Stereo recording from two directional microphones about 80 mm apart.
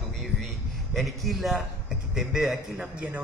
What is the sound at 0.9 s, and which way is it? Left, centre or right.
A man's voice, centre.